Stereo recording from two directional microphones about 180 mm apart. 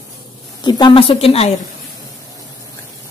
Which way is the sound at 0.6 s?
25° left (ahead or behind).